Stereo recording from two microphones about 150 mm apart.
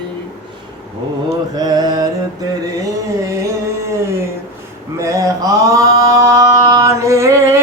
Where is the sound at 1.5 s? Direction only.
25° right (ahead or behind).